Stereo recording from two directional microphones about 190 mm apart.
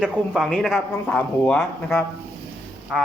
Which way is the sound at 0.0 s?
Centre (ahead or behind).